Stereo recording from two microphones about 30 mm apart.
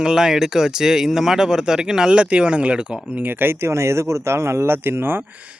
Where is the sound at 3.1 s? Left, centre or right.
Right.